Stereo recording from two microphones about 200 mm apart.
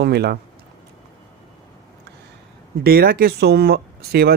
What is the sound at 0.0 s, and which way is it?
Speech, 55° right (ahead or behind).